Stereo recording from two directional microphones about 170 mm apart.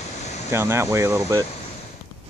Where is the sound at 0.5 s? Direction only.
15° right (ahead or behind).